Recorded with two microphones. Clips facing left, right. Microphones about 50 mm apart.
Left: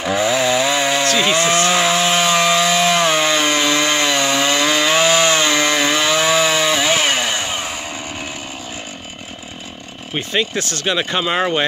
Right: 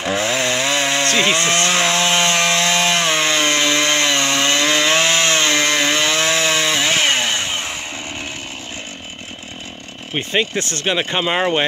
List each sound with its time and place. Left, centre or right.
0.0 s chainsaw: centre
2.3 s wood: centre
4.7 s chainsaw: centre
10.1 s speech: right
11.0 s speech: centre